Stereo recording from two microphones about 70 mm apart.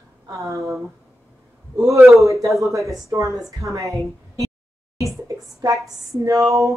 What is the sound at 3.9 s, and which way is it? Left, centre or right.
Speech, centre.